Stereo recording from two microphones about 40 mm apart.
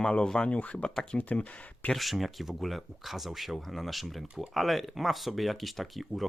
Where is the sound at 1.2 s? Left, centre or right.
Left.